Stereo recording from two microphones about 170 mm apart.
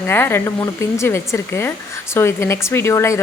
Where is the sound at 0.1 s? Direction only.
15° left (ahead or behind).